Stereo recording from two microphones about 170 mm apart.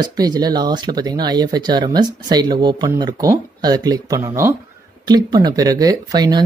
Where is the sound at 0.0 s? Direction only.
25° right (ahead or behind).